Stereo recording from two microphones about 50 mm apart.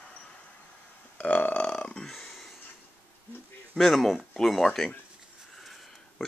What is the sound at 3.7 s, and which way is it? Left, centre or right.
Speech, centre.